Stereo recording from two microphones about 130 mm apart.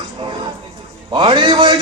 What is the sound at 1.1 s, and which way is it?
Speech, 40° right (ahead or behind).